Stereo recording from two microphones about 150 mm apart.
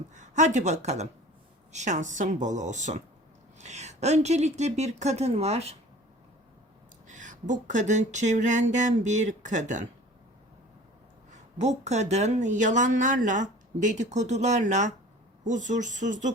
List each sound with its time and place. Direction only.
0.1 s speech: 50° right (ahead or behind)
7.1 s speech: 55° right (ahead or behind)
11.3 s speech: 50° right (ahead or behind)